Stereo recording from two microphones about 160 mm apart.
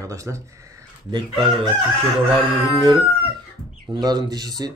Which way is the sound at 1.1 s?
30° right (ahead or behind).